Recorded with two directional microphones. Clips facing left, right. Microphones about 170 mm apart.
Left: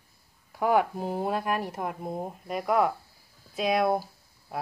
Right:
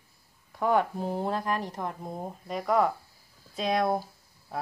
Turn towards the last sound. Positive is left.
turn(degrees=5)  # may be behind; listen again after turning